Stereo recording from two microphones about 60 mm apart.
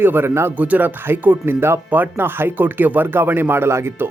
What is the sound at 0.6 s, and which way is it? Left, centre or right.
Speech, right.